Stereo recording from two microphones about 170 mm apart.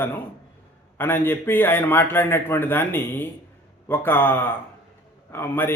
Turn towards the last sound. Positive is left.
turn(degrees=15)  # may be behind; listen again after turning